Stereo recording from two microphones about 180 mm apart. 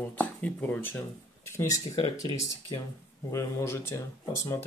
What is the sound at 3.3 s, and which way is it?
Speech, 15° left (ahead or behind).